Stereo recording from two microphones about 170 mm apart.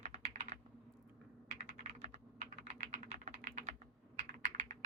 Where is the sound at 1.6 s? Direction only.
45° right (ahead or behind).